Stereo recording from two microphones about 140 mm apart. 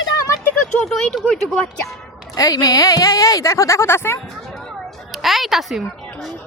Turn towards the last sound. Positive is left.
turn(degrees=0)  # may be behind; listen again after turning